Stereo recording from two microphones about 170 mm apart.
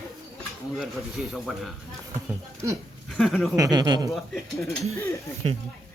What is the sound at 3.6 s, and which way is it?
Speech, 25° right (ahead or behind).